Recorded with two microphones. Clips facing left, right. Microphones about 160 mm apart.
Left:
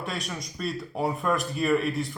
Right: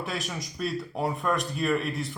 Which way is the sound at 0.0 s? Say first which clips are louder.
Even; centre (ahead or behind).